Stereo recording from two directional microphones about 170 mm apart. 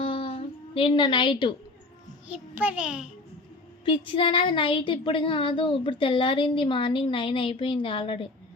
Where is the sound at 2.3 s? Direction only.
10° right (ahead or behind).